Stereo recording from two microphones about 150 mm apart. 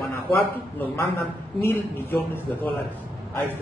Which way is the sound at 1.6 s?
15° left (ahead or behind).